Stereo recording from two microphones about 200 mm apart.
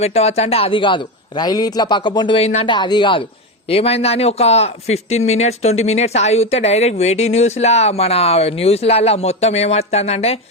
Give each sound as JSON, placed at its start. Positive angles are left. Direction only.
{"t": 0.0, "sound": "a man's voice", "side_deg": 30}